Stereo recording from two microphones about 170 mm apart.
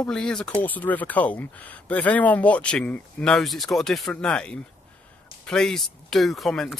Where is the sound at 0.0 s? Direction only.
5° left (ahead or behind).